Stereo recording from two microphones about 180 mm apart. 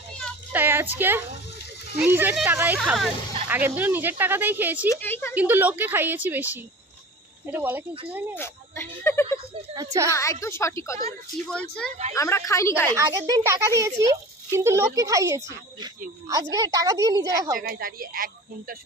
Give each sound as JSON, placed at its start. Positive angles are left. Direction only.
{"t": 0.5, "sound": "a child's voice", "side_deg": -10}
{"t": 4.9, "sound": "a woman's voice", "side_deg": 10}
{"t": 5.3, "sound": "a child's voice", "side_deg": -10}
{"t": 8.4, "sound": "a woman's voice", "side_deg": 15}
{"t": 9.7, "sound": "a woman's voice", "side_deg": -20}
{"t": 10.1, "sound": "a woman's voice", "side_deg": 15}
{"t": 12.1, "sound": "a woman's voice", "side_deg": 15}
{"t": 12.9, "sound": "a child's voice", "side_deg": -20}
{"t": 17.6, "sound": "a woman's voice", "side_deg": -55}